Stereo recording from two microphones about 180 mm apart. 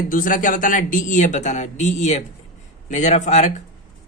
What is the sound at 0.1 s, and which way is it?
Speech, 50° left (ahead or behind).